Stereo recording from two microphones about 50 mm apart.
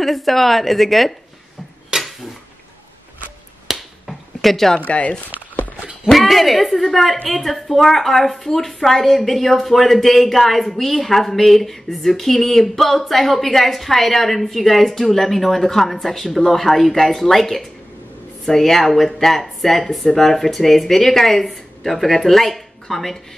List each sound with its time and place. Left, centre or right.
0.0 s a woman's voice: centre
1.9 s a sound: centre
3.7 s finger snapping: centre
4.4 s speech: centre
4.7 s speech: left
6.1 s a woman's voice: centre